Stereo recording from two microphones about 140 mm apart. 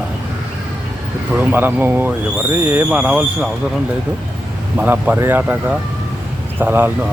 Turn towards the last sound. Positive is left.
turn(degrees=-15)  # may be behind; listen again after turning